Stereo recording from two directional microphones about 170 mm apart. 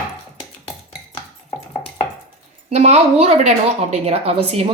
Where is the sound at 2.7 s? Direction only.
40° right (ahead or behind).